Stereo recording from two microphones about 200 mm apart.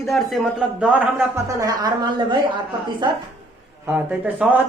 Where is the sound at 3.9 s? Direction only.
10° right (ahead or behind).